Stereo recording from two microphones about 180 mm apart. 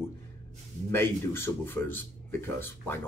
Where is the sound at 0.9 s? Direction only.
15° left (ahead or behind).